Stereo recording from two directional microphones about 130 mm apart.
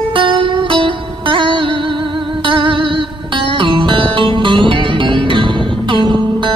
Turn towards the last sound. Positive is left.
turn(degrees=-40)  # may be behind; listen again after turning